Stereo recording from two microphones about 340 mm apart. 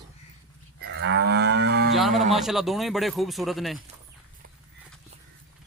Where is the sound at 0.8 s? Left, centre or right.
Right.